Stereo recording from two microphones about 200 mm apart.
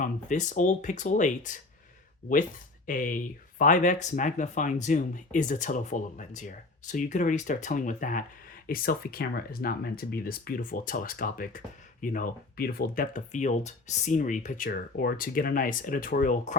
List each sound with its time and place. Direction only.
0.0 s speech: 40° left (ahead or behind)
2.8 s speech: 40° left (ahead or behind)